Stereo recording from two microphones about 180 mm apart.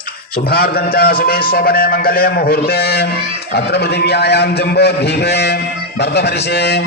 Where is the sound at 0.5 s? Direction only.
60° left (ahead or behind).